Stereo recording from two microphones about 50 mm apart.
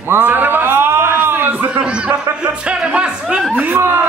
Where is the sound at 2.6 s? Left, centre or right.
Right.